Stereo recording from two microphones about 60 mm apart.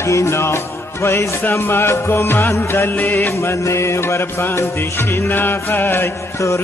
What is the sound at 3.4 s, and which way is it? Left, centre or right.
Music, left.